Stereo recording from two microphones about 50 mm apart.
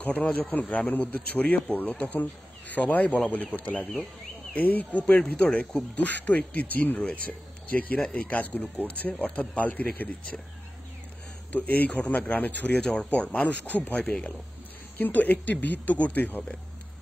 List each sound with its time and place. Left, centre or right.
0.0 s a man's voice: left
4.6 s a man's voice: left
11.5 s a man's voice: left
13.9 s speech: left
15.0 s a man's voice: left